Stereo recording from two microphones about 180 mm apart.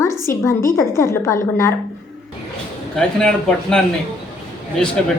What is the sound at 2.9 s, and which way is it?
Speech, 5° left (ahead or behind).